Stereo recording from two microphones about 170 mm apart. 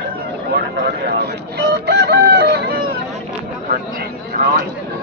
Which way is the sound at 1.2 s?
80° right.